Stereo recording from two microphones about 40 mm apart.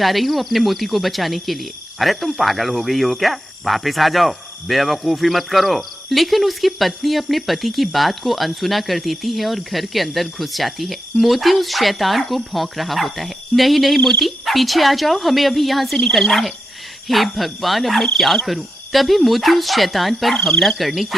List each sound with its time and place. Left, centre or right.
0.0 s speech: centre
20.3 s speech: centre